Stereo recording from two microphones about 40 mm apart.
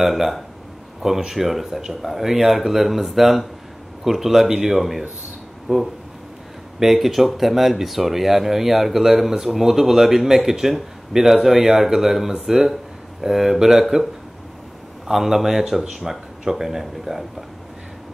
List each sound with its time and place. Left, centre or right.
0.0 s speech: centre
5.7 s speech: right
6.8 s speech: centre
15.0 s speech: centre